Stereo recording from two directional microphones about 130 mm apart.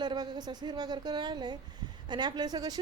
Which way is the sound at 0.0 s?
35° right (ahead or behind).